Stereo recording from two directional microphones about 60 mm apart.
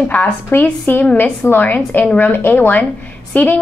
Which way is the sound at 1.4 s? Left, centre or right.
Left.